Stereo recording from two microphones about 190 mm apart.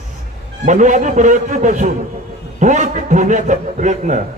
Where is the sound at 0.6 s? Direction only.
40° right (ahead or behind).